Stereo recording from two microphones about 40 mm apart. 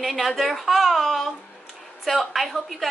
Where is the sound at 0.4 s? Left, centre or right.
Centre.